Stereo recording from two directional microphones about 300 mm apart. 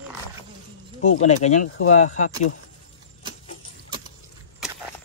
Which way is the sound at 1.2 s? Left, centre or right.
Left.